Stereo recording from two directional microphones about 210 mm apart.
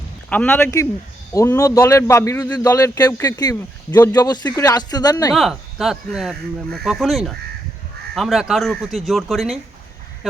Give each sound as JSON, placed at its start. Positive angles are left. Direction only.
{"t": 0.3, "sound": "a man's voice", "side_deg": 10}
{"t": 5.3, "sound": "speech", "side_deg": 0}